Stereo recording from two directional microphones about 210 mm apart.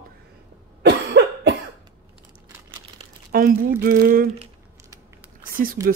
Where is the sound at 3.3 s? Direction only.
45° right (ahead or behind).